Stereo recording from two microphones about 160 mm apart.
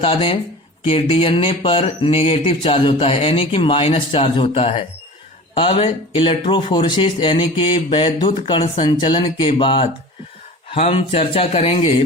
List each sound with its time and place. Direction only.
0.0 s speech: 35° left (ahead or behind)